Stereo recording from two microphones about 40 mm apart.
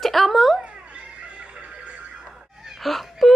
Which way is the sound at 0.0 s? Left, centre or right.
Centre.